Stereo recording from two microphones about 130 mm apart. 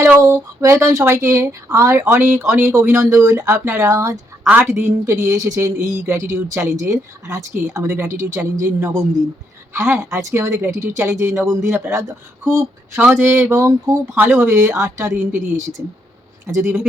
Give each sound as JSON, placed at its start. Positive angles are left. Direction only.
{"t": 0.2, "sound": "speech", "side_deg": -25}
{"t": 16.5, "sound": "speech", "side_deg": -20}